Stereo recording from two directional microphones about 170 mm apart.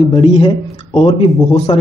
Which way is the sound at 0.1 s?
35° left (ahead or behind).